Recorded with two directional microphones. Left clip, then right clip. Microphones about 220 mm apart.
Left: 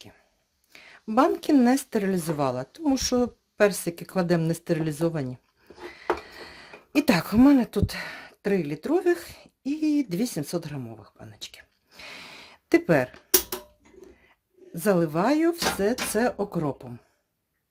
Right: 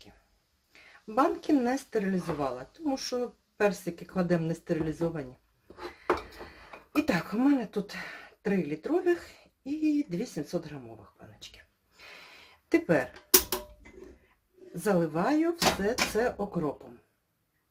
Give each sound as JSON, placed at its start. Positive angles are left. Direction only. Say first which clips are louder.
{"t": 0.7, "sound": "speech", "louder": "left 6 dB", "side_deg": 50}
{"t": 11.2, "sound": "a sound", "louder": "left 7 dB", "side_deg": 50}
{"t": 14.8, "sound": "speech", "louder": "left 5 dB", "side_deg": 50}